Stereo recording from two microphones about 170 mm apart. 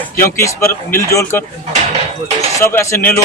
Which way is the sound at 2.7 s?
15° left (ahead or behind).